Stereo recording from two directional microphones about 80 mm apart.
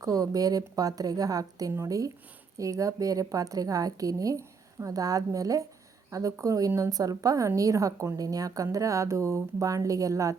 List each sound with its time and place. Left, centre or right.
0.0 s a woman's voice: right